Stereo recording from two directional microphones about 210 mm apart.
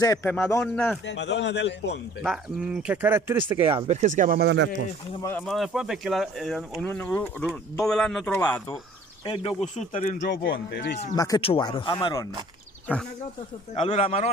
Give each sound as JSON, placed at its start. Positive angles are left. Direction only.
{"t": 0.0, "sound": "speech", "side_deg": 10}
{"t": 1.0, "sound": "speech", "side_deg": 55}
{"t": 2.2, "sound": "speech", "side_deg": -5}
{"t": 3.7, "sound": "speech", "side_deg": -30}
{"t": 5.5, "sound": "speech", "side_deg": 0}
{"t": 9.2, "sound": "speech", "side_deg": 20}
{"t": 10.3, "sound": "speech", "side_deg": 55}
{"t": 11.1, "sound": "speech", "side_deg": 20}
{"t": 13.7, "sound": "speech", "side_deg": 25}